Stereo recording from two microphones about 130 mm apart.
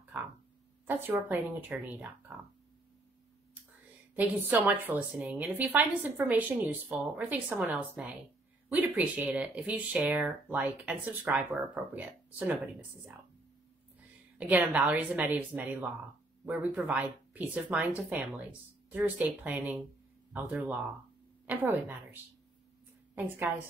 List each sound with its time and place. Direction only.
0.1 s a sound: 10° right (ahead or behind)
0.8 s a woman's voice: 15° right (ahead or behind)
4.1 s a woman's voice: 15° right (ahead or behind)
14.4 s a woman's voice: 10° right (ahead or behind)